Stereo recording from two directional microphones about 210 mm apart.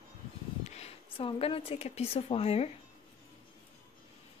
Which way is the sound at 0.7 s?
30° left (ahead or behind).